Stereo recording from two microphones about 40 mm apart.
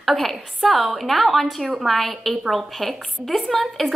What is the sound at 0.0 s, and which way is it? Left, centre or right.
A woman's voice, centre.